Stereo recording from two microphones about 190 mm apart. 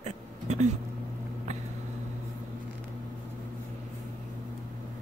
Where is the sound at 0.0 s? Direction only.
35° right (ahead or behind).